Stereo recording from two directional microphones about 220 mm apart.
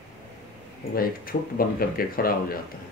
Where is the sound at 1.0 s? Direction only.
40° left (ahead or behind).